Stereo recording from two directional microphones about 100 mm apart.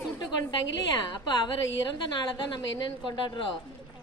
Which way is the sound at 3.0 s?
50° left (ahead or behind).